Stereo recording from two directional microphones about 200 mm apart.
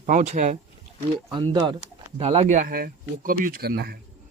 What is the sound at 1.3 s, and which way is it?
Speech, 20° right (ahead or behind).